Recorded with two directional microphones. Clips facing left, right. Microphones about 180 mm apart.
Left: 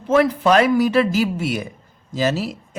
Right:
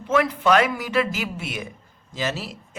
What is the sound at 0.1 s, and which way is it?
A man's voice, 35° left (ahead or behind).